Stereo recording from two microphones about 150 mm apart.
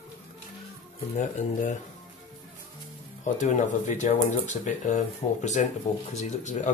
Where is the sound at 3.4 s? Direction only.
55° left (ahead or behind).